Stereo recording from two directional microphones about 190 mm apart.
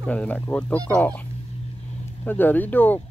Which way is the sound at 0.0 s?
5° left (ahead or behind).